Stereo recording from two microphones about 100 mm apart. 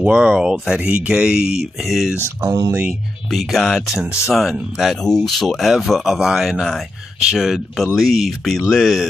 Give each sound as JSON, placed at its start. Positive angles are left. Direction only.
{"t": 0.0, "sound": "speech", "side_deg": -10}
{"t": 2.4, "sound": "speech", "side_deg": -35}
{"t": 2.9, "sound": "speech", "side_deg": 0}